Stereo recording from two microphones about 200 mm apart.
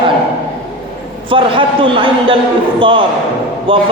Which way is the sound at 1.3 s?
25° right (ahead or behind).